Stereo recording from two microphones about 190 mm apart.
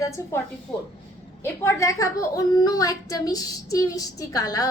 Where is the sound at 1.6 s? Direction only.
15° left (ahead or behind).